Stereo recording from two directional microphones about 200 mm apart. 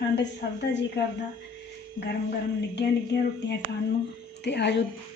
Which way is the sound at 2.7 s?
60° left (ahead or behind).